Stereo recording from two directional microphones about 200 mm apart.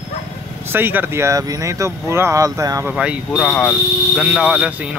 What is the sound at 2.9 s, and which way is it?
Speech, 5° right (ahead or behind).